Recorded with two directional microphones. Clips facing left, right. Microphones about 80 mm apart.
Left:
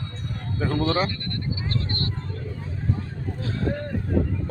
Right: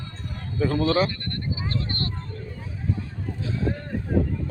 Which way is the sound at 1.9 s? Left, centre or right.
Left.